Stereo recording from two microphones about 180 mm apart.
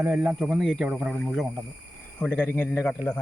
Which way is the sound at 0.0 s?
10° right (ahead or behind).